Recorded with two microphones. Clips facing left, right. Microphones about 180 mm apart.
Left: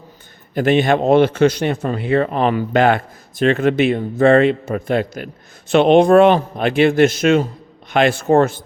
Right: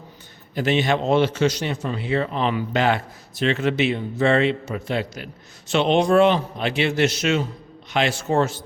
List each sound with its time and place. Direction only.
0.5 s a man's voice: 55° left (ahead or behind)